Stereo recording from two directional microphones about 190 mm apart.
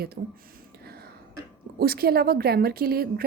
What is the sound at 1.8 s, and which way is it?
A woman's voice, 55° right (ahead or behind).